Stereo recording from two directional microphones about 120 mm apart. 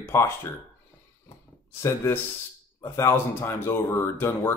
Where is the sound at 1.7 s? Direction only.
25° left (ahead or behind).